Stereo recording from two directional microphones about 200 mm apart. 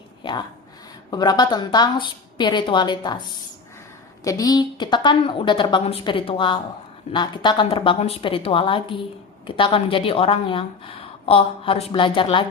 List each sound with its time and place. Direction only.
0.2 s a sound: 25° left (ahead or behind)
1.1 s a woman's voice: 20° left (ahead or behind)
4.2 s a woman's voice: 15° left (ahead or behind)